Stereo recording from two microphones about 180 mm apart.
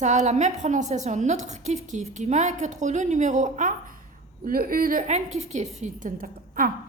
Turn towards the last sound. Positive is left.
turn(degrees=-50)  # may be behind; listen again after turning